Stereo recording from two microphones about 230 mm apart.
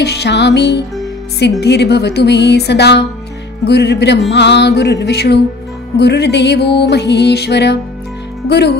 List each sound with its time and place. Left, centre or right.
0.0 s music: left